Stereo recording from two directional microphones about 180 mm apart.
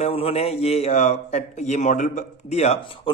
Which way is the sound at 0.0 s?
35° left (ahead or behind).